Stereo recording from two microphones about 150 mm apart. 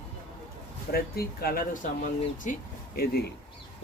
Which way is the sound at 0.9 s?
90° left.